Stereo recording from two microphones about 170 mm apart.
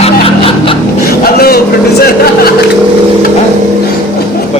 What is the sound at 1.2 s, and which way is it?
Vehicle, 65° left (ahead or behind).